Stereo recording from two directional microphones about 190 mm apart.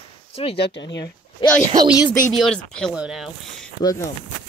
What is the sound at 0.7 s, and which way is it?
Speech, 70° left (ahead or behind).